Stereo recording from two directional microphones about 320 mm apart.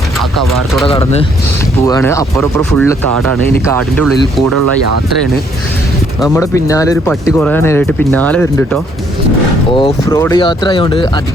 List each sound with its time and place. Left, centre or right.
0.2 s speech: centre
0.9 s speech: centre
4.4 s speech: right
6.2 s speech: centre